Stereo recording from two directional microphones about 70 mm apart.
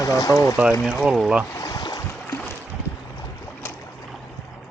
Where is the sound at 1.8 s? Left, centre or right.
Left.